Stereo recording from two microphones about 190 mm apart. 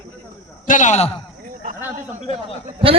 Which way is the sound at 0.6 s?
40° left (ahead or behind).